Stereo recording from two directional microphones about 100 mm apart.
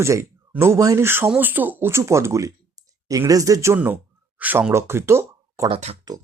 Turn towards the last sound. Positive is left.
turn(degrees=-40)  # may be behind; listen again after turning